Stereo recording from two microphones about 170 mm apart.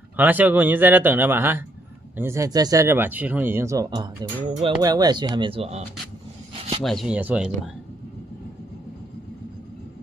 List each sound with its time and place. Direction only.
0.1 s speech: 10° right (ahead or behind); by 5.9 s 40° right (ahead or behind)
6.8 s speech: centre (ahead or behind)